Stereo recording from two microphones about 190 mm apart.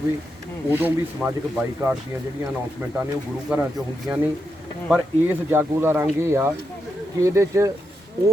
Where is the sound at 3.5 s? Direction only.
5° right (ahead or behind).